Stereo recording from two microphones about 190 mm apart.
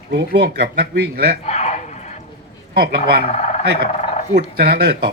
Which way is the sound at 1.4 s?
35° left (ahead or behind).